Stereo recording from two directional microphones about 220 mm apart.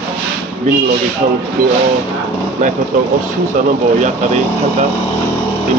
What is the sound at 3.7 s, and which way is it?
Speech, 35° right (ahead or behind).